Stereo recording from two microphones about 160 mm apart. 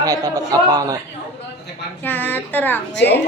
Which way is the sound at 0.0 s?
20° right (ahead or behind).